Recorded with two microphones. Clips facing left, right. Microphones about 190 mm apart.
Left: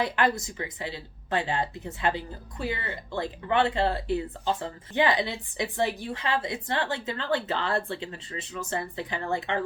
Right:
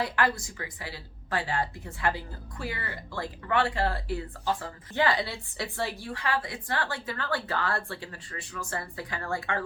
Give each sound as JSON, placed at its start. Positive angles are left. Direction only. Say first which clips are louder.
{"t": 0.0, "sound": "speech", "louder": "left 2 dB", "side_deg": 20}